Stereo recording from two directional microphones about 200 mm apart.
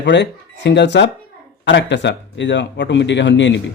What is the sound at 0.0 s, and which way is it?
Speech, 60° left (ahead or behind).